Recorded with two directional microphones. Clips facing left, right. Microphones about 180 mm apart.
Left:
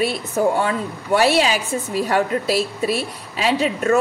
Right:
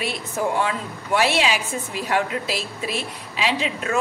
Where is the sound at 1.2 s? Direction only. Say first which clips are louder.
Left 4 dB; 40° left (ahead or behind).